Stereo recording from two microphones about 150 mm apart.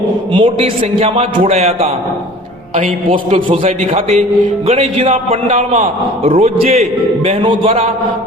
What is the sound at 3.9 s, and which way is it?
A man's voice, 40° right (ahead or behind).